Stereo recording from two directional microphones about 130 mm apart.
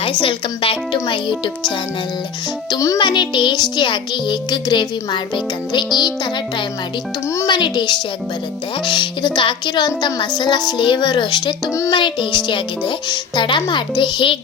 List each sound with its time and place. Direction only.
0.0 s music: 40° left (ahead or behind)
2.6 s speech: 25° left (ahead or behind)
3.0 s music: 35° left (ahead or behind)